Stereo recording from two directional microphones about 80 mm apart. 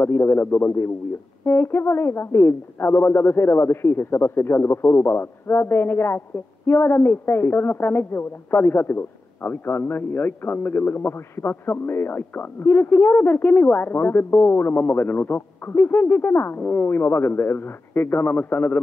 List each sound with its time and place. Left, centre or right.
0.0 s a man's voice: left